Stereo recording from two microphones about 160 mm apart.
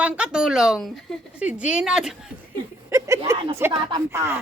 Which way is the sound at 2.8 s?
20° right (ahead or behind).